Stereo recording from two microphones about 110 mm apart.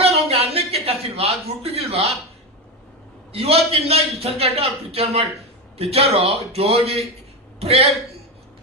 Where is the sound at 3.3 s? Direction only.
65° right (ahead or behind).